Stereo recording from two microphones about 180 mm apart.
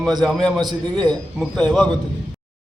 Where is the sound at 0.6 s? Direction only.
25° right (ahead or behind).